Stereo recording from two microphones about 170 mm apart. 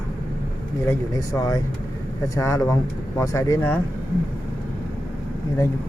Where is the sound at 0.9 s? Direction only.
20° left (ahead or behind).